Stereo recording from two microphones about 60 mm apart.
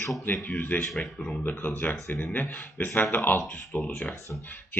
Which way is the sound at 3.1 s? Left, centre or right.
Left.